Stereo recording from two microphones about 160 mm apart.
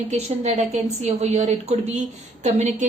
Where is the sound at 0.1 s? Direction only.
45° right (ahead or behind).